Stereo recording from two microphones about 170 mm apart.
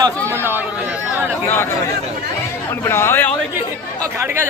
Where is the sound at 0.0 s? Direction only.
15° right (ahead or behind).